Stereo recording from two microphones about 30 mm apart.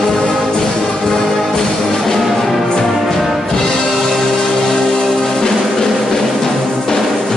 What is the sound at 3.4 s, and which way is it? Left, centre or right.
Music, left.